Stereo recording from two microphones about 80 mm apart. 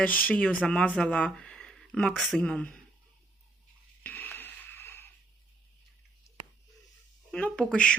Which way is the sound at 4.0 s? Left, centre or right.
Left.